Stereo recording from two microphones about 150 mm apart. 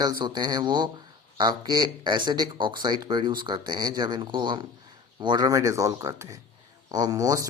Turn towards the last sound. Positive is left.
turn(degrees=-25)  # may be behind; listen again after turning